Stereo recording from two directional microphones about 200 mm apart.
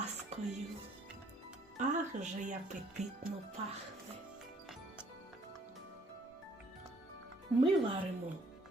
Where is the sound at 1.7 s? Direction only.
35° right (ahead or behind).